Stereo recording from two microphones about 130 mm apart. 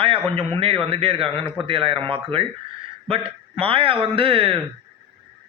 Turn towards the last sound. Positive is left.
turn(degrees=-45)  # may be behind; listen again after turning